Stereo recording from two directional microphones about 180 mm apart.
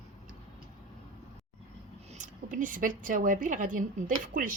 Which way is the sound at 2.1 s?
45° right (ahead or behind).